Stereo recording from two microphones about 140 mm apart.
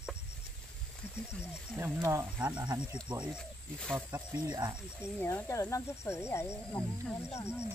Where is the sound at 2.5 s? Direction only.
30° right (ahead or behind).